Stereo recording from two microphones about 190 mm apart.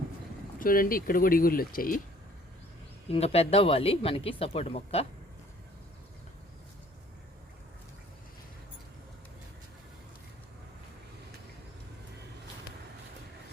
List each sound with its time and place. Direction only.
0.6 s speech: 50° left (ahead or behind)
3.1 s speech: 30° left (ahead or behind)